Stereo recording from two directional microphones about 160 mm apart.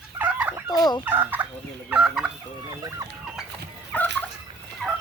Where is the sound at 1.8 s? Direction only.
5° right (ahead or behind).